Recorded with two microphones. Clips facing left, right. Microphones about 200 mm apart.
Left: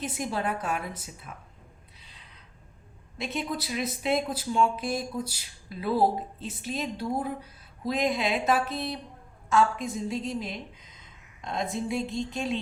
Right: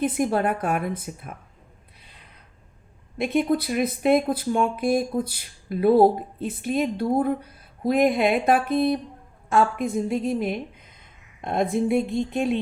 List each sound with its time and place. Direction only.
0.0 s speech: 55° right (ahead or behind)
2.0 s a sound: 55° right (ahead or behind)
3.2 s a woman's voice: 55° right (ahead or behind)